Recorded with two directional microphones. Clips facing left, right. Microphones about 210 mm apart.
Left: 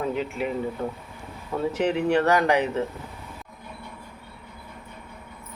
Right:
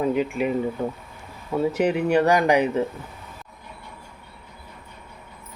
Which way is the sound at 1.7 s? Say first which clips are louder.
Right 1 dB; 10° right (ahead or behind).